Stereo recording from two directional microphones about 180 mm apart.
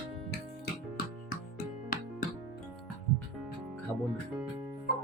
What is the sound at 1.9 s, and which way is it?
Music, 45° left (ahead or behind).